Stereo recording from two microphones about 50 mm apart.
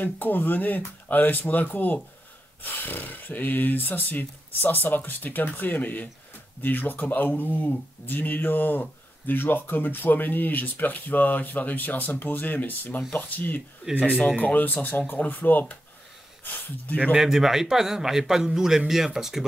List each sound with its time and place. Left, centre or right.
0.0 s speech: left
17.1 s a man's voice: centre